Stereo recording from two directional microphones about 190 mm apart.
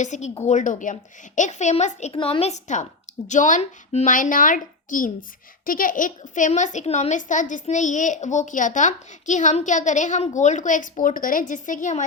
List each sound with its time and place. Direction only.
0.0 s a woman's voice: 40° left (ahead or behind)